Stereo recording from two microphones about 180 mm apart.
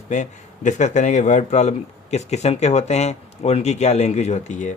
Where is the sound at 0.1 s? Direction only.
40° left (ahead or behind).